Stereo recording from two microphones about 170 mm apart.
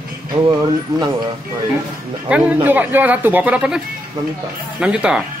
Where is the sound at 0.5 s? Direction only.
25° right (ahead or behind).